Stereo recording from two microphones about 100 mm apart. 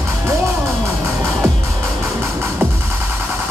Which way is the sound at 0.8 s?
25° right (ahead or behind).